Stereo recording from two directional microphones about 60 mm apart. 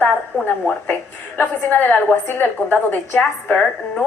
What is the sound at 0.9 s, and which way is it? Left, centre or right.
A woman's voice, left.